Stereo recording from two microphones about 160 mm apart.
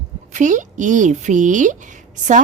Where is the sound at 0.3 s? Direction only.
50° right (ahead or behind).